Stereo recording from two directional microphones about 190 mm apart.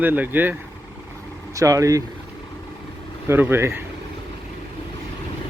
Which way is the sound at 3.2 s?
10° right (ahead or behind).